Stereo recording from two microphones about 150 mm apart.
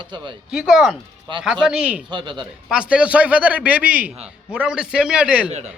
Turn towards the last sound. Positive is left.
turn(degrees=-5)  # may be behind; listen again after turning